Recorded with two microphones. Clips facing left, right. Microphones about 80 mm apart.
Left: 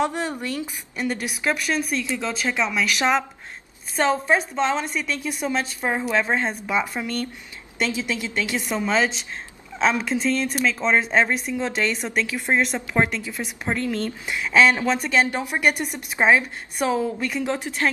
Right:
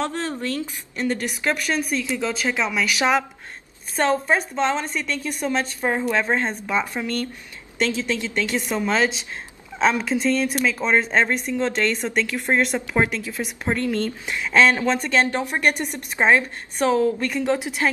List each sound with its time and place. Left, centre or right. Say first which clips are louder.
0.0 s speech: left 1 dB; centre